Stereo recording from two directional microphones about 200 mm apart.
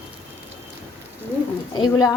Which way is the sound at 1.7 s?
20° left (ahead or behind).